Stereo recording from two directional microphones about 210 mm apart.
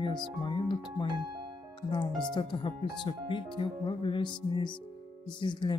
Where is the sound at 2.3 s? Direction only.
25° left (ahead or behind).